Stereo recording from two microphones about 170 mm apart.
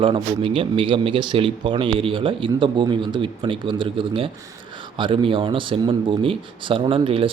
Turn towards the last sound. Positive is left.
turn(degrees=-30)  # may be behind; listen again after turning